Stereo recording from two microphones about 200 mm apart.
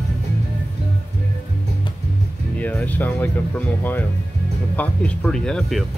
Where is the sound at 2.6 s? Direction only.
10° left (ahead or behind).